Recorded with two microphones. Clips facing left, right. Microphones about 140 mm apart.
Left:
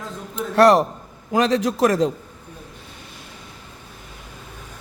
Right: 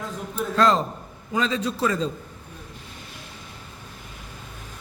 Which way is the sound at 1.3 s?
75° left (ahead or behind).